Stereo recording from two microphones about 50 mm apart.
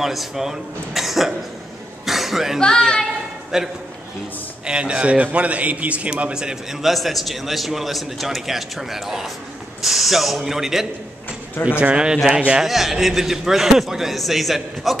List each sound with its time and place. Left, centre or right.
0.0 s a man's voice: centre
2.0 s cough: centre
2.6 s speech: centre
3.5 s a man's voice: centre
4.6 s a man's voice: centre
6.8 s a man's voice: centre
11.8 s a man's voice: centre
12.6 s a man's voice: centre